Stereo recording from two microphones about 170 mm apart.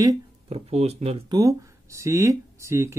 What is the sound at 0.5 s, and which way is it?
Speech, 35° right (ahead or behind).